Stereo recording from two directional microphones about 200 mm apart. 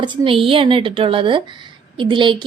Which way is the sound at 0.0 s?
25° right (ahead or behind).